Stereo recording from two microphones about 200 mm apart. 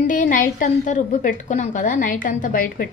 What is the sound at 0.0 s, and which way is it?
A woman's voice, 40° left (ahead or behind).